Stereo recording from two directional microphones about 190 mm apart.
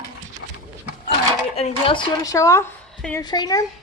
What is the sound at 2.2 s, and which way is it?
A child's voice, 15° left (ahead or behind).